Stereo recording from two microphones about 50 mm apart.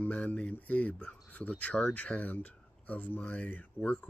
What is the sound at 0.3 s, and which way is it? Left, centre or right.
Speech, left.